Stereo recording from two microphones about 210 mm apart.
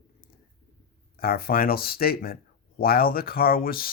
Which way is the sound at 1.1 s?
45° left (ahead or behind).